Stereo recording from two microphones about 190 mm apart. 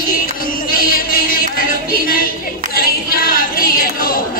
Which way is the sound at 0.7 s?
50° left (ahead or behind).